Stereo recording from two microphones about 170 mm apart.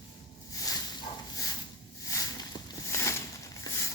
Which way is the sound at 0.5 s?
20° left (ahead or behind).